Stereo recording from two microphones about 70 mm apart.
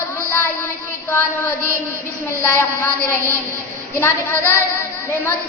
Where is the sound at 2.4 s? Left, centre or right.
Left.